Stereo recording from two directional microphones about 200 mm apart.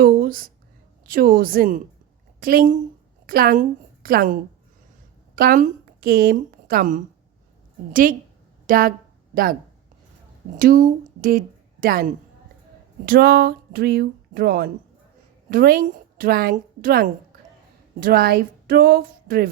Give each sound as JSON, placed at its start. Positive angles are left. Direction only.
{"t": 0.0, "sound": "a sound", "side_deg": -50}
{"t": 1.0, "sound": "a woman's voice", "side_deg": -45}
{"t": 8.6, "sound": "speech", "side_deg": -45}
{"t": 10.6, "sound": "a woman's voice", "side_deg": -45}